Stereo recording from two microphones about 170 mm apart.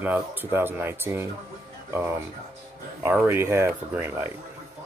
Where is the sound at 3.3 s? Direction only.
15° right (ahead or behind).